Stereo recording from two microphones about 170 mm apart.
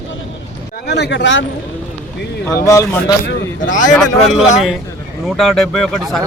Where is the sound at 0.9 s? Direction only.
85° left.